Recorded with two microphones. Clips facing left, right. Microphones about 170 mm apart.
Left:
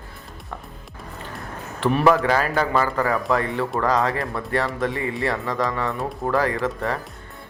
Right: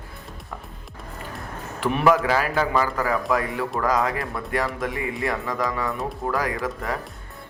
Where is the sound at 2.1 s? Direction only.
10° right (ahead or behind).